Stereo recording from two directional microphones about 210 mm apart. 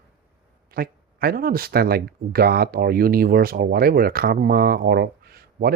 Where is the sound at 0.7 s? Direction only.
45° right (ahead or behind).